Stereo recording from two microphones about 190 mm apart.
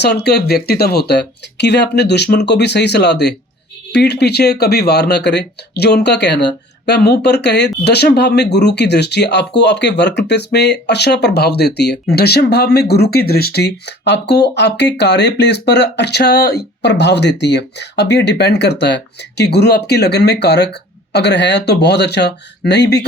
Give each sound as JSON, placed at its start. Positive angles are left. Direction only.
{"t": 0.0, "sound": "speech", "side_deg": 60}